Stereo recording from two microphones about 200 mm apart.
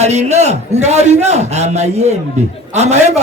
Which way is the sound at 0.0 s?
35° right (ahead or behind).